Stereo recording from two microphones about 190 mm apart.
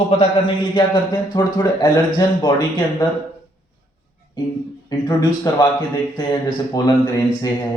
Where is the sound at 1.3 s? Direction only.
20° left (ahead or behind).